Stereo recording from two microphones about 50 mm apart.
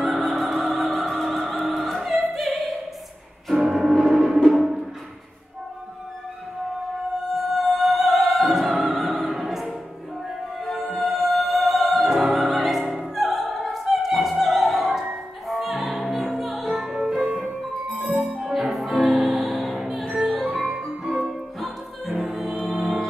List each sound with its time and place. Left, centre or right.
0.0 s opera: centre
3.4 s music: centre
7.3 s opera: centre
10.6 s music: centre
17.9 s music: right
18.4 s music: centre
20.7 s music: centre